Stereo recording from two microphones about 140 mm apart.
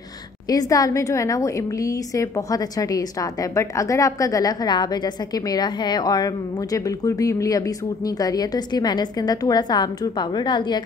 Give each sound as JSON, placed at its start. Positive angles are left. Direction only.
{"t": 0.5, "sound": "a woman's voice", "side_deg": 25}